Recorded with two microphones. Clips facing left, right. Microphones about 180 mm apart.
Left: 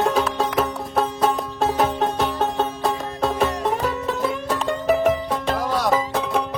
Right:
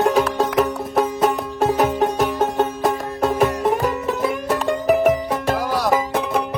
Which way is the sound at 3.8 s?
Centre (ahead or behind).